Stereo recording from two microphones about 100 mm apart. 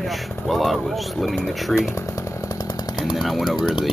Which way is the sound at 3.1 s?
Centre (ahead or behind).